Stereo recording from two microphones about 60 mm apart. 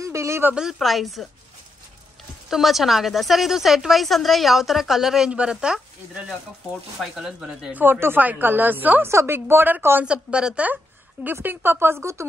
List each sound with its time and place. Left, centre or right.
0.0 s a sound: right
0.7 s a woman's voice: centre
2.5 s a woman's voice: centre
7.7 s speech: right
9.0 s speech: right
10.0 s speech: centre
11.4 s speech: right